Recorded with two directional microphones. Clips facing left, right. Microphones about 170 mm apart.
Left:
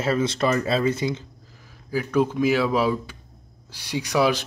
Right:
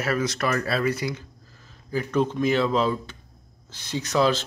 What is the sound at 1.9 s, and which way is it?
Speech, 10° left (ahead or behind).